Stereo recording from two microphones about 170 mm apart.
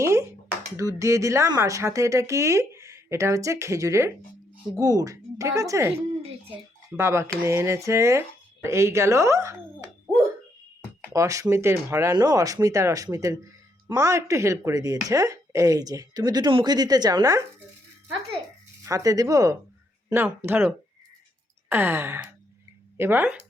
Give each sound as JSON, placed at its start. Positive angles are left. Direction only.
{"t": 0.0, "sound": "a sound", "side_deg": -15}
{"t": 0.8, "sound": "speech", "side_deg": -20}
{"t": 11.1, "sound": "speech", "side_deg": -20}
{"t": 18.8, "sound": "speech", "side_deg": -20}